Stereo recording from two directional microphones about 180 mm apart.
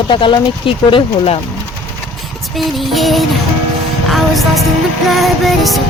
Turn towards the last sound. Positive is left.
turn(degrees=0)  # may be behind; listen again after turning